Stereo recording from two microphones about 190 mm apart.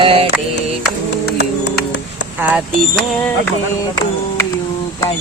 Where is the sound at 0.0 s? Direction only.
30° right (ahead or behind).